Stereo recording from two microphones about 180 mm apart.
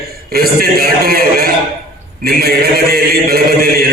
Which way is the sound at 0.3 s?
55° right (ahead or behind).